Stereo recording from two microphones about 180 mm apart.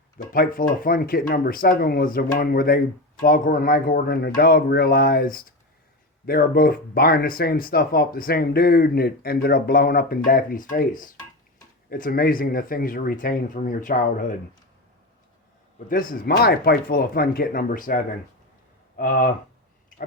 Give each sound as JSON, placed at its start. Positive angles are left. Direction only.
{"t": 0.2, "sound": "speech", "side_deg": 50}
{"t": 15.9, "sound": "speech", "side_deg": 50}